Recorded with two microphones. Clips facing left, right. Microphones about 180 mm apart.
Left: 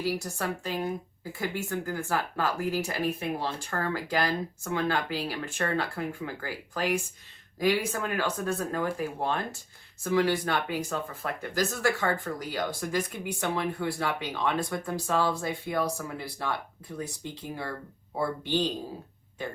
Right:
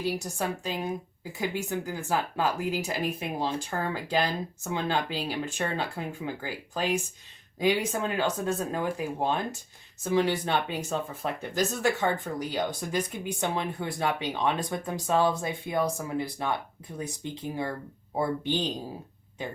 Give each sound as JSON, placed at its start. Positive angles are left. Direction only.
{"t": 0.0, "sound": "a woman's voice", "side_deg": -20}
{"t": 18.2, "sound": "speech", "side_deg": -15}